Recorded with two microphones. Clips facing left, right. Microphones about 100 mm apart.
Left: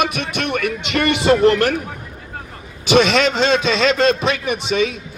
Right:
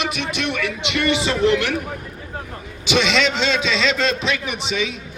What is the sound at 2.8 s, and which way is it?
Speech, 45° left (ahead or behind).